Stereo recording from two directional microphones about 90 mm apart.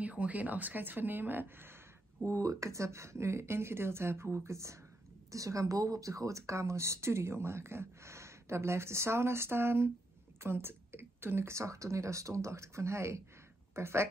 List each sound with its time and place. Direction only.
0.0 s a woman's voice: 15° right (ahead or behind)
2.2 s a woman's voice: 35° right (ahead or behind)